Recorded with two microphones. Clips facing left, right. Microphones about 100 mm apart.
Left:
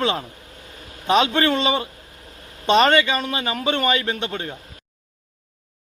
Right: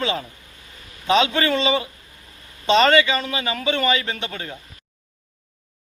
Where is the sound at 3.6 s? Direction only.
45° left (ahead or behind).